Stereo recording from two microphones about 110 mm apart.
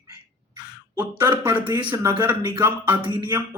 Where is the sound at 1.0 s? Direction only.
20° right (ahead or behind).